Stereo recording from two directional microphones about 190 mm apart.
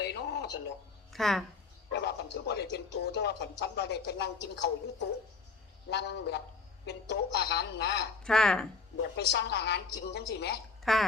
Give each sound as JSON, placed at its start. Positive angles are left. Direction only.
{"t": 0.0, "sound": "radio", "side_deg": 60}
{"t": 1.1, "sound": "speech", "side_deg": 0}
{"t": 1.9, "sound": "speech", "side_deg": 65}
{"t": 5.9, "sound": "speech", "side_deg": 60}
{"t": 8.2, "sound": "speech", "side_deg": 5}
{"t": 9.0, "sound": "speech", "side_deg": 65}
{"t": 10.9, "sound": "speech", "side_deg": 0}